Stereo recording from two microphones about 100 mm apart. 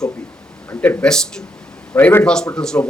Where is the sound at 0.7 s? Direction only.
20° left (ahead or behind).